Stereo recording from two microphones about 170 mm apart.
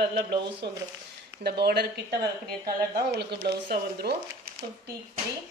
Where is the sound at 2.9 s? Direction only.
75° right (ahead or behind).